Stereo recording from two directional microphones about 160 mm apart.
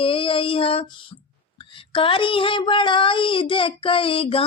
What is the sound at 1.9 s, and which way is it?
Speech, 35° left (ahead or behind).